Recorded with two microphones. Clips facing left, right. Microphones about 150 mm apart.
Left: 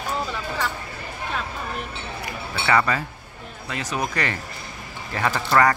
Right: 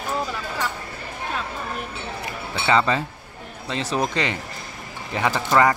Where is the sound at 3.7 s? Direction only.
30° right (ahead or behind).